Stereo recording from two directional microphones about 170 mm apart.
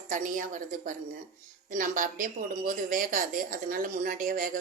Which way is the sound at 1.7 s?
50° right (ahead or behind).